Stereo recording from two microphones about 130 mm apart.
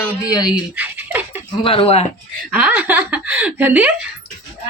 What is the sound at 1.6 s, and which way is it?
Speech, 45° left (ahead or behind).